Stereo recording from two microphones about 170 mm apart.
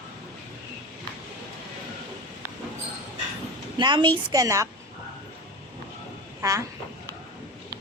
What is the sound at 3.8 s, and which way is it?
Speech, 25° right (ahead or behind).